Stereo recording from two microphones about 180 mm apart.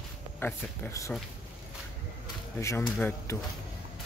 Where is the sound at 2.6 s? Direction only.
15° left (ahead or behind).